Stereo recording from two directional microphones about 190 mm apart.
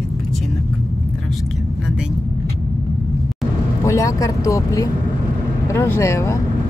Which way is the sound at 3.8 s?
15° left (ahead or behind).